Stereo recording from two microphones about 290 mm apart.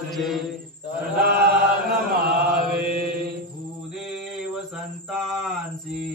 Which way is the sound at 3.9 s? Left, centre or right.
Centre.